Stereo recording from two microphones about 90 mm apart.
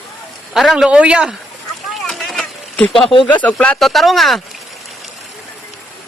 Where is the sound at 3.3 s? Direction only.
15° left (ahead or behind).